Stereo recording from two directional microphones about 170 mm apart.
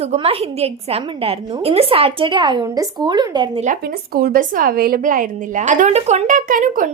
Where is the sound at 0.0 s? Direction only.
35° right (ahead or behind).